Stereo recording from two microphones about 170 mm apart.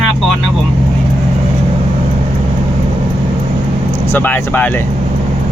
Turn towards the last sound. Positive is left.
turn(degrees=10)  # may be behind; listen again after turning